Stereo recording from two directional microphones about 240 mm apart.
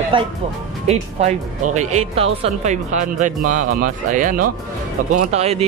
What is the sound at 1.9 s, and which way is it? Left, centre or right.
A man's voice, right.